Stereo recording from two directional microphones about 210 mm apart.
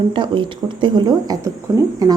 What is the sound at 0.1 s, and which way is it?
A woman's voice, 25° right (ahead or behind).